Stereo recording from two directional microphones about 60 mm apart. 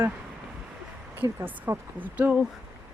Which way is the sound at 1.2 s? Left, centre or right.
Right.